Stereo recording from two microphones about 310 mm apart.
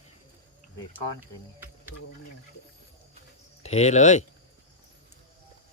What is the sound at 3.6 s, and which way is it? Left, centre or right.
Speech, left.